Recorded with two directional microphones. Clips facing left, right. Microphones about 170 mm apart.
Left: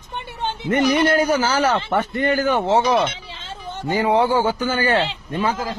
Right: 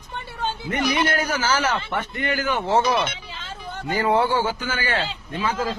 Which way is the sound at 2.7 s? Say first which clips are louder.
Even; 25° left (ahead or behind).